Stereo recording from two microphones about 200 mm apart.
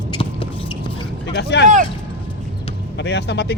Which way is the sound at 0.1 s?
25° left (ahead or behind).